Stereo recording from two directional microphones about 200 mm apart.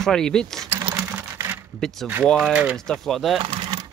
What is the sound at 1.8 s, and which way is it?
Speech, centre (ahead or behind).